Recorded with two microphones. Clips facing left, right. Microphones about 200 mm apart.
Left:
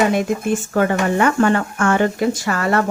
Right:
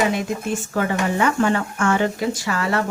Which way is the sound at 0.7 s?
55° left (ahead or behind).